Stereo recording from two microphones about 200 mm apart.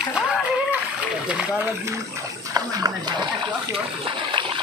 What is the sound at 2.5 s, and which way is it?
Speech, 20° right (ahead or behind).